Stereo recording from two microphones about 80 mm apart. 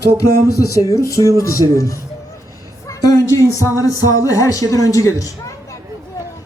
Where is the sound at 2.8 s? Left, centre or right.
Left.